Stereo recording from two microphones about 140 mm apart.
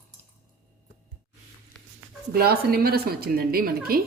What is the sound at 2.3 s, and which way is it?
A woman's voice, 90° right.